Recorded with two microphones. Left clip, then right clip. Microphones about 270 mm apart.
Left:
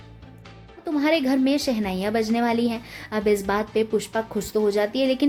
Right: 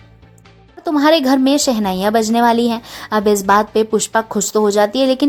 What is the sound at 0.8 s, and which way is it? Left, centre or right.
A woman's voice, right.